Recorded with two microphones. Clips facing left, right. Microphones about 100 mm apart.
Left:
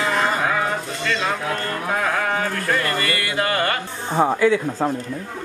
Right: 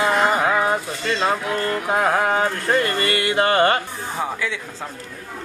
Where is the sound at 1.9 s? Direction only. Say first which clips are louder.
Right 3 dB; 25° right (ahead or behind).